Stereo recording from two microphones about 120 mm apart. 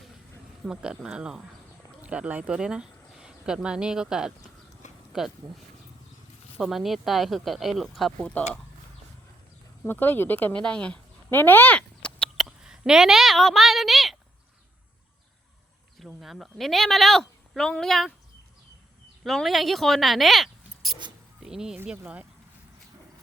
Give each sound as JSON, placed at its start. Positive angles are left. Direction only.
{"t": 0.6, "sound": "speech", "side_deg": -5}
{"t": 4.8, "sound": "a sound", "side_deg": 85}
{"t": 6.6, "sound": "speech", "side_deg": 0}
{"t": 9.8, "sound": "speech", "side_deg": 15}
{"t": 12.5, "sound": "a sound", "side_deg": -5}
{"t": 16.0, "sound": "speech", "side_deg": 0}
{"t": 19.2, "sound": "speech", "side_deg": 0}